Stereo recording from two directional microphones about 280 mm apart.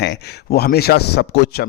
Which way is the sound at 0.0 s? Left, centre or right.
Left.